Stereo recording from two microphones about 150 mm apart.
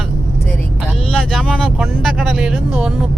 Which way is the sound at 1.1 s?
5° left (ahead or behind).